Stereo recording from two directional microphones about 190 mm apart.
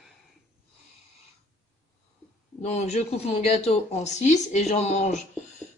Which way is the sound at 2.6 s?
35° left (ahead or behind).